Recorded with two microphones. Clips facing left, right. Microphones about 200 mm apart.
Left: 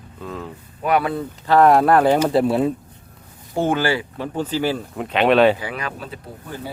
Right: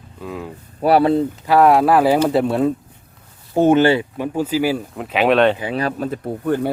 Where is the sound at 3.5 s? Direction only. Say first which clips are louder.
Right 7 dB; 20° right (ahead or behind).